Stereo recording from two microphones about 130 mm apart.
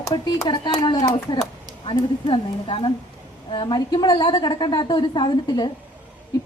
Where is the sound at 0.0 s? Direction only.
35° left (ahead or behind).